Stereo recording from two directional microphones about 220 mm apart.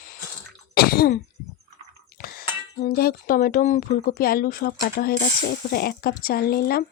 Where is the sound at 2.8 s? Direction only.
40° left (ahead or behind).